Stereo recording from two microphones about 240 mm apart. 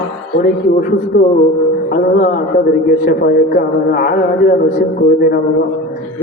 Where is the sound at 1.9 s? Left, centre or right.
Left.